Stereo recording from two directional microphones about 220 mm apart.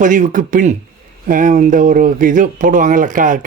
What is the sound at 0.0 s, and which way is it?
Speech, 35° right (ahead or behind).